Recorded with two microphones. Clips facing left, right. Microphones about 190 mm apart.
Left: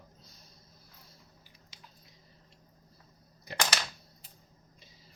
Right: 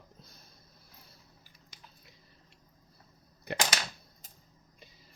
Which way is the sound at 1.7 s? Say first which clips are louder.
Even; 50° right (ahead or behind).